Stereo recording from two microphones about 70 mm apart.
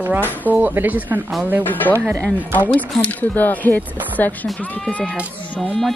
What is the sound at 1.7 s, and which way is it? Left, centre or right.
Speech, left.